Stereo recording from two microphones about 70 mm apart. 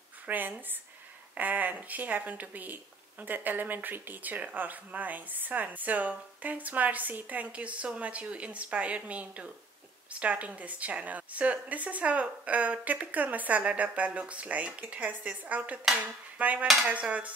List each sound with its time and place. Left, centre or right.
0.3 s speech: right